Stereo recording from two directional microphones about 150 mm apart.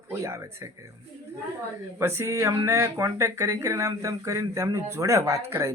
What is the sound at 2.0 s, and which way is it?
Speech, 20° right (ahead or behind).